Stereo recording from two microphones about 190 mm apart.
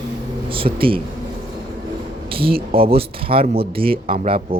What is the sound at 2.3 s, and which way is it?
Speech, 30° right (ahead or behind).